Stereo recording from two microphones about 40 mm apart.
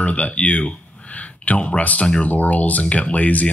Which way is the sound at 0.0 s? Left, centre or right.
Left.